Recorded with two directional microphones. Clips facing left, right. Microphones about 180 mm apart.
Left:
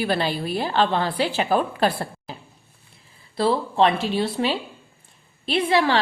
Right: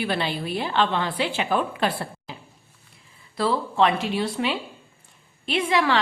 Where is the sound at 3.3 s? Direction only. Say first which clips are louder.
Left 2 dB; 30° left (ahead or behind).